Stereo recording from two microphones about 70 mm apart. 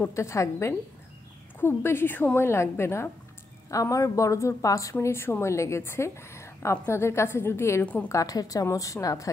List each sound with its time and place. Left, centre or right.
0.1 s a woman's voice: left
2.3 s a woman's voice: left
3.7 s a woman's voice: left
5.0 s a woman's voice: left
7.8 s a woman's voice: left
8.1 s a woman's voice: left